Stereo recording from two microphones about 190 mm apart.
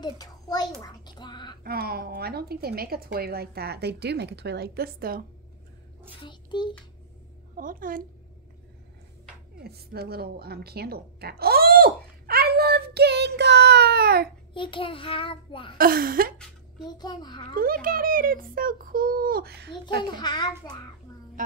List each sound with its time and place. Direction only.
0.0 s a child's voice: 20° left (ahead or behind)
1.6 s a woman's voice: 55° right (ahead or behind)
6.2 s a child's voice: 25° left (ahead or behind)
7.5 s a child's voice: 45° right (ahead or behind)
9.6 s a woman's voice: 55° right (ahead or behind)
14.5 s a child's voice: 25° left (ahead or behind)
15.8 s a child's voice: 50° right (ahead or behind)
16.8 s a child's voice: 20° left (ahead or behind)
17.6 s a child's voice: 50° right (ahead or behind)
20.0 s a child's voice: 25° left (ahead or behind)